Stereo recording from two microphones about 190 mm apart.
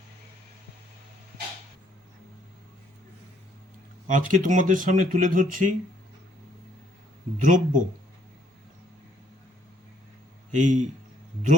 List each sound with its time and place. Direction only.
4.0 s speech: 40° right (ahead or behind)
7.4 s speech: 40° right (ahead or behind)
10.5 s a man's voice: 40° right (ahead or behind)